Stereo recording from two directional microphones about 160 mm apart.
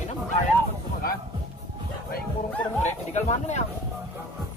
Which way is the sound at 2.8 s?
45° left (ahead or behind).